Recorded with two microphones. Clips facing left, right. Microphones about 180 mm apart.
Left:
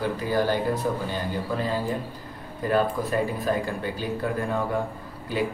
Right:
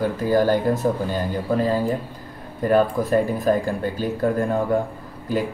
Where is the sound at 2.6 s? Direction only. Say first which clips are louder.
Right 5 dB; 45° right (ahead or behind).